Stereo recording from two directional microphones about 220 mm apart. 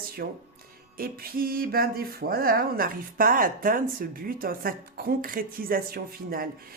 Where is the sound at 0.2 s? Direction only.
45° right (ahead or behind).